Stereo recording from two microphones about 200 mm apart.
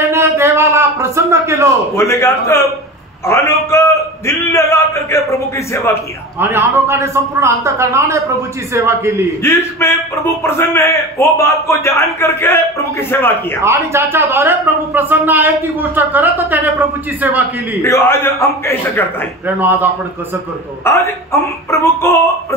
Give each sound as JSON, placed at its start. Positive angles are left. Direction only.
{"t": 0.1, "sound": "a sound", "side_deg": -10}
{"t": 2.0, "sound": "a man's voice", "side_deg": 15}
{"t": 6.4, "sound": "a man's voice", "side_deg": -15}
{"t": 9.4, "sound": "a man's voice", "side_deg": 10}
{"t": 13.6, "sound": "a man's voice", "side_deg": -15}
{"t": 17.8, "sound": "a man's voice", "side_deg": 15}
{"t": 19.4, "sound": "a man's voice", "side_deg": -10}
{"t": 20.8, "sound": "a man's voice", "side_deg": 15}